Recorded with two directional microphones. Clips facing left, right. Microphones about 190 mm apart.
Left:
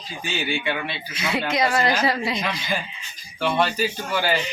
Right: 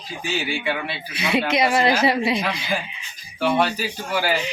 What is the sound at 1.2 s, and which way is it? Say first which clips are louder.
A man's voice: right 3 dB; 20° right (ahead or behind).